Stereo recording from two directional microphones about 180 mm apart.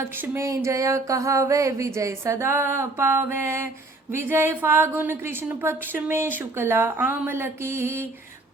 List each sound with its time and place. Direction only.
0.0 s a woman's voice: 15° right (ahead or behind)